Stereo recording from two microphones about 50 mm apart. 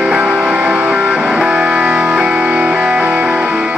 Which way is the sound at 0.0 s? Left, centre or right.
Right.